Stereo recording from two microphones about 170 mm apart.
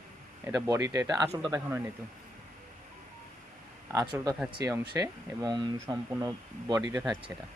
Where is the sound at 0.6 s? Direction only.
20° right (ahead or behind).